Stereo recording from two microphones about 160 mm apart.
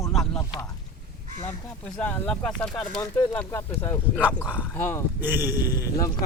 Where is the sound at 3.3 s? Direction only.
15° left (ahead or behind).